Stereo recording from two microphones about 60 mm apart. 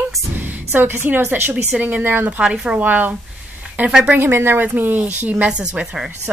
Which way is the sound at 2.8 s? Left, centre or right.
Right.